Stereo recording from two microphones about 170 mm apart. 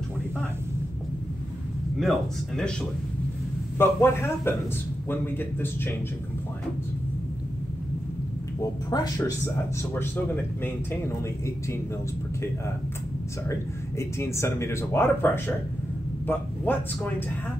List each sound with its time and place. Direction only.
2.0 s speech: centre (ahead or behind)
3.7 s speech: 15° left (ahead or behind)
8.9 s speech: 20° left (ahead or behind)
9.9 s speech: 10° left (ahead or behind)
13.5 s speech: 15° left (ahead or behind)